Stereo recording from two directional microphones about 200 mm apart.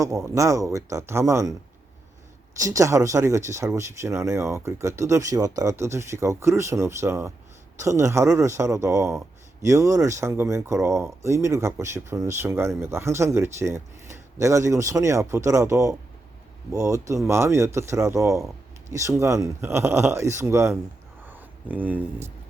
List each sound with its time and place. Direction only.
0.3 s speech: 15° right (ahead or behind)
2.6 s speech: 15° right (ahead or behind)
21.2 s a sound: 10° right (ahead or behind)